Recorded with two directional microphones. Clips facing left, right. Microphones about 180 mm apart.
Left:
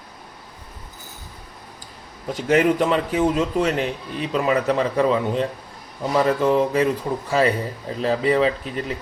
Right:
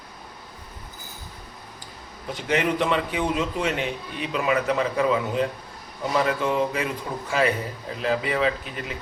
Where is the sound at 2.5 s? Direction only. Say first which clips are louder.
Left 5 dB; 45° left (ahead or behind).